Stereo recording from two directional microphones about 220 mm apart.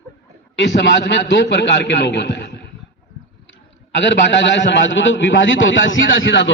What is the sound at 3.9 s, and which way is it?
A man's voice, 55° left (ahead or behind).